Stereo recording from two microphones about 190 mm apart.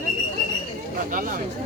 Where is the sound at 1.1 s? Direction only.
50° right (ahead or behind).